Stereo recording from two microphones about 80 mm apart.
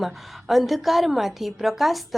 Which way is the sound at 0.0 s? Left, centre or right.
Centre.